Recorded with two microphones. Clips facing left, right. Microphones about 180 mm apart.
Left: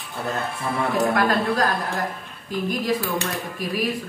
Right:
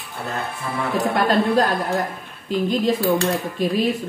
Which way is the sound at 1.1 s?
25° right (ahead or behind).